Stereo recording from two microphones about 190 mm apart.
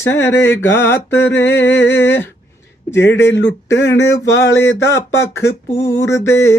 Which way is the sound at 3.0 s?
70° left (ahead or behind).